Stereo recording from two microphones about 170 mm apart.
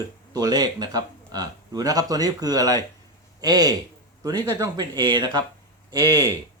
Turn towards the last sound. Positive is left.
turn(degrees=-20)  # may be behind; listen again after turning